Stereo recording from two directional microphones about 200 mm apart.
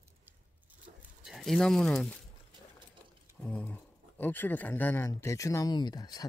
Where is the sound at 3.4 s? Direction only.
5° left (ahead or behind).